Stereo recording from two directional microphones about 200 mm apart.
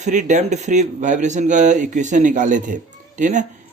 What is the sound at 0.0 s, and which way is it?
A man's voice, 35° right (ahead or behind).